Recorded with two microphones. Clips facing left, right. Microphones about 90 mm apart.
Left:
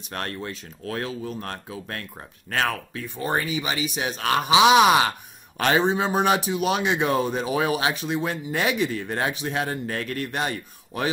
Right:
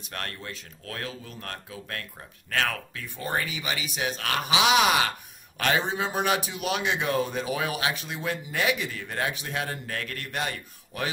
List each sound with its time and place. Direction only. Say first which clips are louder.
0.1 s a man's voice: left 5 dB; 30° left (ahead or behind)